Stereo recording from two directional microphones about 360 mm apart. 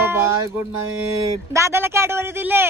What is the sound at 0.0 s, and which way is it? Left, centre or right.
Music, centre.